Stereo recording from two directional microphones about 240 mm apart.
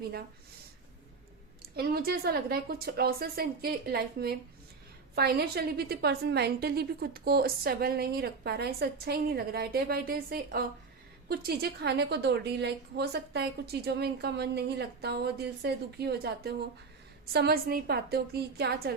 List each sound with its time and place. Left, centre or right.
1.7 s a woman's voice: right